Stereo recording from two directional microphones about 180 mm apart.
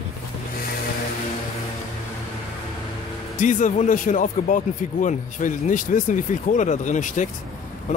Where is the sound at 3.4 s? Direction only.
45° left (ahead or behind).